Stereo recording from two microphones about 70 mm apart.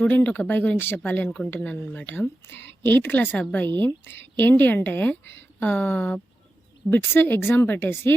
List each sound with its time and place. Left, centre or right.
0.1 s speech: left